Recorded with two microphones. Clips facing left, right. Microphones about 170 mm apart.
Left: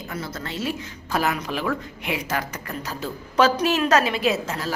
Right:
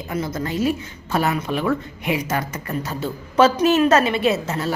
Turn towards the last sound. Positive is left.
turn(degrees=0)  # may be behind; listen again after turning